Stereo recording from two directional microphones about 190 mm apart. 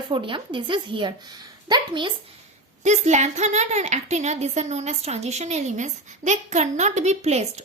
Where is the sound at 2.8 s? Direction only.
35° right (ahead or behind).